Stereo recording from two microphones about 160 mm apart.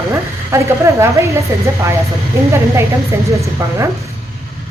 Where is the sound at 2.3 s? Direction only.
20° right (ahead or behind).